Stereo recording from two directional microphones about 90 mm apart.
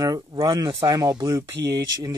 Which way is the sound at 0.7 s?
40° right (ahead or behind).